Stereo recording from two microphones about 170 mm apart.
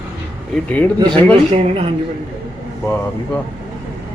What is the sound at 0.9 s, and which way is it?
Speech, 25° right (ahead or behind).